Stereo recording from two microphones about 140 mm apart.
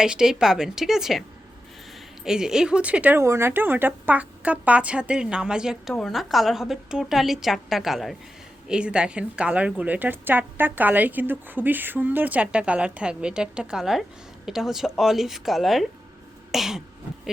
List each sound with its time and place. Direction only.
0.0 s a woman's voice: 5° right (ahead or behind)
2.2 s a woman's voice: 5° right (ahead or behind)
16.5 s throat clearing: centre (ahead or behind)